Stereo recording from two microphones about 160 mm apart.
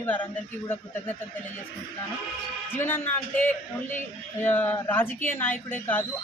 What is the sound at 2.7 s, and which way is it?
Speech, 15° left (ahead or behind).